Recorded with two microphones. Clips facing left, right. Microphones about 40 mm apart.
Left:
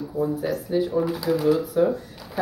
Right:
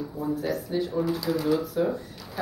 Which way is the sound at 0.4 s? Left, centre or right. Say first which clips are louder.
Left 4 dB; centre.